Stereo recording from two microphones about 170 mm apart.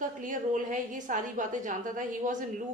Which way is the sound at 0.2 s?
50° right (ahead or behind).